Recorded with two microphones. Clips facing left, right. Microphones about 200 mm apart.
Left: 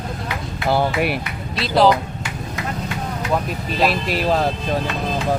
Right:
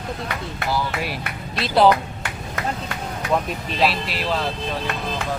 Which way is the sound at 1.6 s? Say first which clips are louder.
Left 1 dB; centre (ahead or behind).